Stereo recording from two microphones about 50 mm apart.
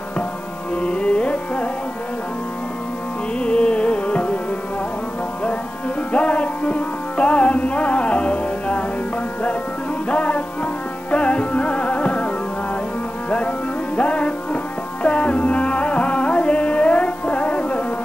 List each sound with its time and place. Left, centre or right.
0.7 s classical music: centre
3.3 s music: centre
6.1 s music: left
10.0 s music: left
13.9 s music: left